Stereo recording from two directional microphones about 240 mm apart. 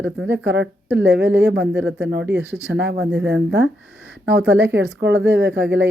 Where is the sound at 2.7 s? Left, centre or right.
Right.